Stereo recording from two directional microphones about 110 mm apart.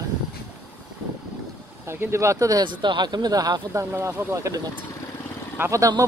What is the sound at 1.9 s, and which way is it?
Speech, 25° right (ahead or behind).